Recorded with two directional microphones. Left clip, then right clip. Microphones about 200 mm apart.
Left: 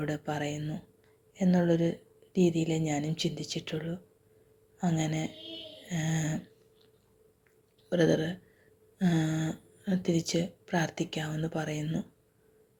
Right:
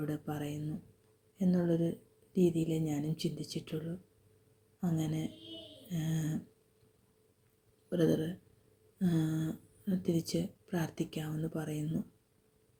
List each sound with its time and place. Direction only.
0.0 s speech: 20° right (ahead or behind)
7.9 s speech: 20° right (ahead or behind)